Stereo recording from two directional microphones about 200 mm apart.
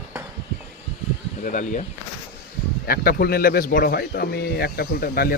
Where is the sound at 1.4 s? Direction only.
40° left (ahead or behind).